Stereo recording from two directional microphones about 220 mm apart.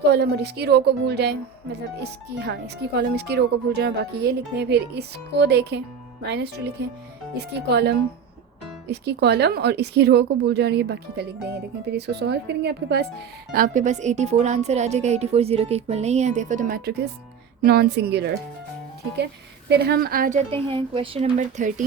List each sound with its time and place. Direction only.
0.0 s a woman's voice: 50° right (ahead or behind)
20.5 s a woman's voice: 25° right (ahead or behind)